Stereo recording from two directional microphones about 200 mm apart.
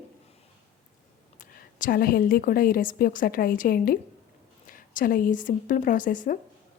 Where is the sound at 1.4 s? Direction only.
45° left (ahead or behind).